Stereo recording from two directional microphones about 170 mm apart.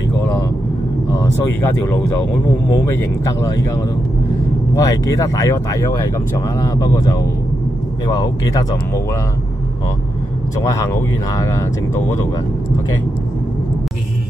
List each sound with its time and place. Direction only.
1.1 s speech: 15° left (ahead or behind)
10.6 s speech: 15° left (ahead or behind)